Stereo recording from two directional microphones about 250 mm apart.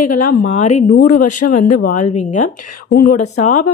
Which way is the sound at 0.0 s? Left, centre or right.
Left.